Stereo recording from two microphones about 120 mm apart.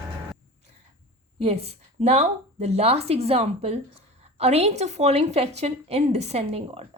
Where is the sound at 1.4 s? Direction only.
60° right (ahead or behind).